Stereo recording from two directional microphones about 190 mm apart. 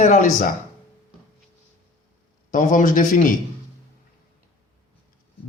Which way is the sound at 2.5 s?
45° left (ahead or behind).